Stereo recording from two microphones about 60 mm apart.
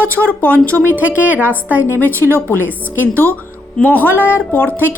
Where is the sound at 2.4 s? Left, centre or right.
Left.